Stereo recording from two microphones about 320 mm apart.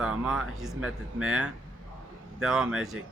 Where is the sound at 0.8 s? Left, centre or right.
Right.